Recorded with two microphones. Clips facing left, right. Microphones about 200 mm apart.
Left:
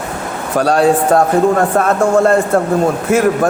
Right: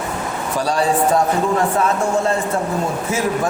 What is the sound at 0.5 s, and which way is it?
A man's voice, 55° left (ahead or behind).